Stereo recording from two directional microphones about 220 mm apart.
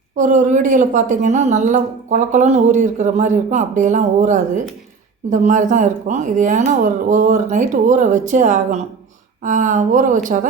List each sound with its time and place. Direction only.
0.2 s a woman's voice: 35° right (ahead or behind)